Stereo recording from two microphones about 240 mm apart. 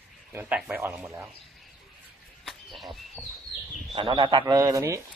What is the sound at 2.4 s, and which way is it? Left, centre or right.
Bird, centre.